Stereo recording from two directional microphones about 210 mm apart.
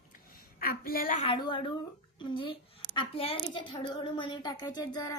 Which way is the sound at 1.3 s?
20° left (ahead or behind).